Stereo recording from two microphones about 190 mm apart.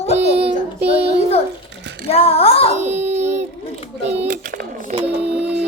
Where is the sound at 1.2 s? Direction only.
35° left (ahead or behind).